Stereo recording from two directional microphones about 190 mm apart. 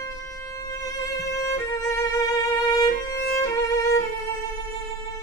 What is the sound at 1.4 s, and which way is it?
Violin, 15° left (ahead or behind).